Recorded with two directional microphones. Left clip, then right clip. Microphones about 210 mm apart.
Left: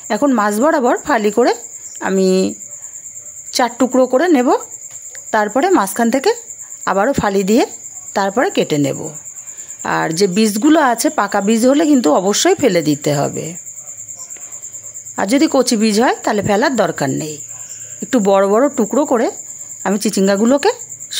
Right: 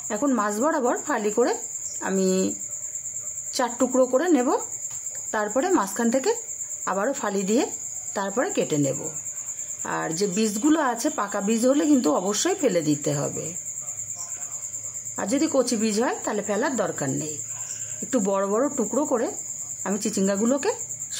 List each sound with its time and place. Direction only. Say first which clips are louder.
0.1 s speech: left 10 dB; 35° left (ahead or behind)
3.5 s speech: left 8 dB; 30° left (ahead or behind)
15.1 s speech: left 10 dB; 35° left (ahead or behind)